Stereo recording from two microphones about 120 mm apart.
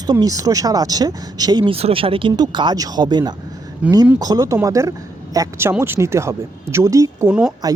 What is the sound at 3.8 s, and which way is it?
Speech, 10° right (ahead or behind).